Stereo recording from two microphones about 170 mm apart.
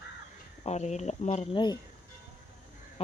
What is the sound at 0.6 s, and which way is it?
Speech, 40° left (ahead or behind).